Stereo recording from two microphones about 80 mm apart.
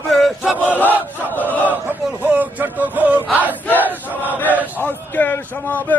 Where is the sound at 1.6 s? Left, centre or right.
Right.